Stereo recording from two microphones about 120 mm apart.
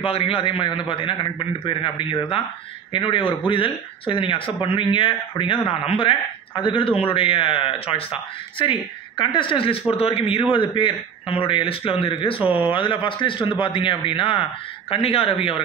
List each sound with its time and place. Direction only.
0.0 s speech: 50° left (ahead or behind)
12.4 s speech: 15° right (ahead or behind)
12.7 s speech: 45° left (ahead or behind)